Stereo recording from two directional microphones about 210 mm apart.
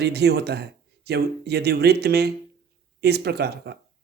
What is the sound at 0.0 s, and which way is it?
Speech, 50° right (ahead or behind).